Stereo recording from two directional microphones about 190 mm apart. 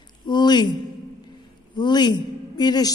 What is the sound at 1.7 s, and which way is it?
A man's voice, 25° left (ahead or behind).